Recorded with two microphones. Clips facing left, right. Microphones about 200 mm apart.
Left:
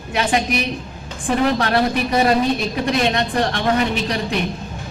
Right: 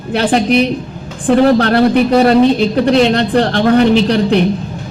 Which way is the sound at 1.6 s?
65° right (ahead or behind).